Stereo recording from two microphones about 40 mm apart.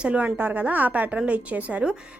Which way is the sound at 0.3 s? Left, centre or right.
Right.